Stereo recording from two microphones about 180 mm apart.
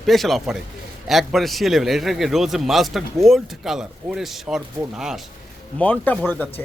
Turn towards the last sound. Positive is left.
turn(degrees=10)  # may be behind; listen again after turning